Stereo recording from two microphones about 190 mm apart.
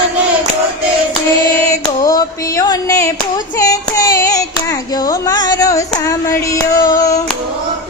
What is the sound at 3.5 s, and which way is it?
Singing, 15° left (ahead or behind).